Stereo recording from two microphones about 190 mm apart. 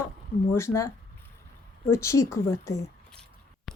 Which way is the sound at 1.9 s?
15° left (ahead or behind).